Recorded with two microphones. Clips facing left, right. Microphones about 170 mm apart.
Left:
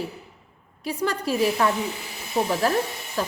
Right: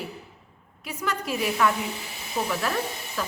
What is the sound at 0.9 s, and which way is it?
A woman's voice, 35° left (ahead or behind).